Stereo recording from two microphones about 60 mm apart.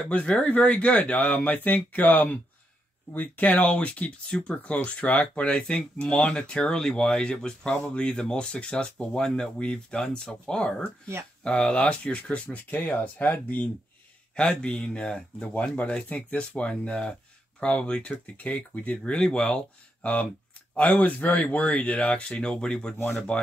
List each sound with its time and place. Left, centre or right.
0.0 s speech: left
14.3 s speech: centre